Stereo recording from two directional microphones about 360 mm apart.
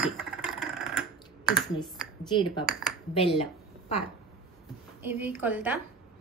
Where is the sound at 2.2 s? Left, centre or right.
Centre.